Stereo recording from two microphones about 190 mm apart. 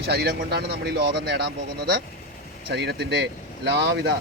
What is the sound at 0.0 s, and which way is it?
Speech, 55° right (ahead or behind).